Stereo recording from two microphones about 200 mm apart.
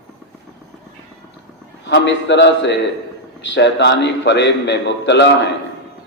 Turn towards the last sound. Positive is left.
turn(degrees=60)  # may be behind; listen again after turning